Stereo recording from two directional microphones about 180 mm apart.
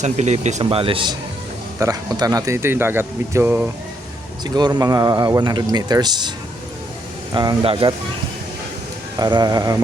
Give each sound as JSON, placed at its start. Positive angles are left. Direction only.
{"t": 0.0, "sound": "speech", "side_deg": -40}
{"t": 4.4, "sound": "speech", "side_deg": -20}
{"t": 7.3, "sound": "speech", "side_deg": -30}
{"t": 9.1, "sound": "speech", "side_deg": -20}